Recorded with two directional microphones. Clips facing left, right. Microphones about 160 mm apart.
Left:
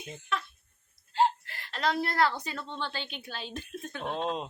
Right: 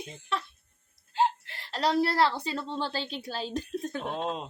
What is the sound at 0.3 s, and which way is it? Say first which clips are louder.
A woman's voice: right 1 dB; 35° right (ahead or behind).